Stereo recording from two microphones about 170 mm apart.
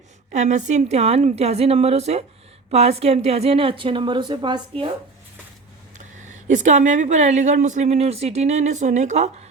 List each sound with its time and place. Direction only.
0.3 s a woman's voice: 45° right (ahead or behind); by 4.9 s 30° right (ahead or behind)
6.0 s speech: 45° right (ahead or behind)